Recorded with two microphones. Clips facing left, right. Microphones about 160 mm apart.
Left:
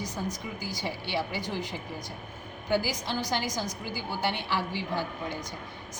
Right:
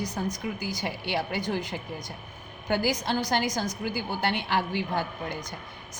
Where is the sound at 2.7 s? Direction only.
55° right (ahead or behind).